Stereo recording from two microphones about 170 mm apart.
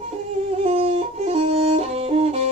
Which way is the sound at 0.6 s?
35° right (ahead or behind).